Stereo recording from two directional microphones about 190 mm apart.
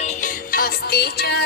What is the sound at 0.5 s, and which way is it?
Music, 55° left (ahead or behind).